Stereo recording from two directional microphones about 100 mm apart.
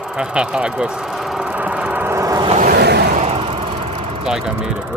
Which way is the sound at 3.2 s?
80° right.